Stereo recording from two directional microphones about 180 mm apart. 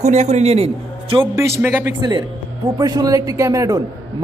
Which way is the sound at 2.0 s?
20° right (ahead or behind).